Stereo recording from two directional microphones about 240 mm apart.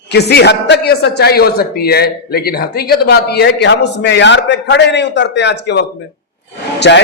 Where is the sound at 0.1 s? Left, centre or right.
Left.